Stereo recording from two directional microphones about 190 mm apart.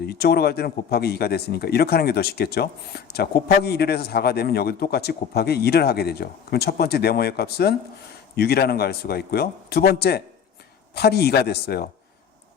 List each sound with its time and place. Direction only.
0.0 s speech: 55° left (ahead or behind)